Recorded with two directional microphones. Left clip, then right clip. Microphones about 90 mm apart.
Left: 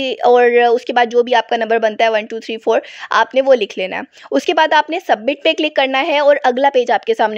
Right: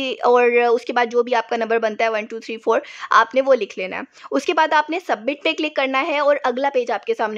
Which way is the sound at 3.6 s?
30° left (ahead or behind).